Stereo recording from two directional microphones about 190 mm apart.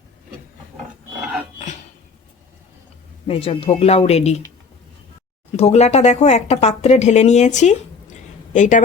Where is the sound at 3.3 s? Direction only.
30° left (ahead or behind).